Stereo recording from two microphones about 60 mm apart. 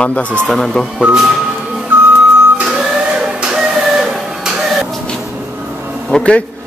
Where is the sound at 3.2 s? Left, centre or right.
Centre.